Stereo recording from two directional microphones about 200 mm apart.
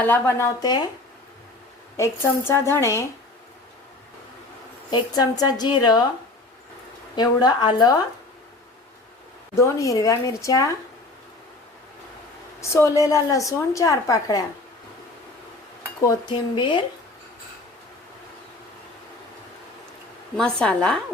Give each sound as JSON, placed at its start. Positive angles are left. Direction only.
{"t": 0.0, "sound": "a woman's voice", "side_deg": 10}
{"t": 2.0, "sound": "a woman's voice", "side_deg": 10}
{"t": 4.9, "sound": "a woman's voice", "side_deg": 20}
{"t": 7.2, "sound": "a woman's voice", "side_deg": 20}
{"t": 9.6, "sound": "a woman's voice", "side_deg": 15}
{"t": 12.5, "sound": "a woman's voice", "side_deg": 15}
{"t": 16.2, "sound": "a woman's voice", "side_deg": 25}
{"t": 20.3, "sound": "speech", "side_deg": 5}